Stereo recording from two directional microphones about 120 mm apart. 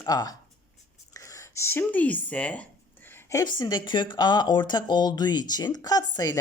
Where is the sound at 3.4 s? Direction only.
40° left (ahead or behind).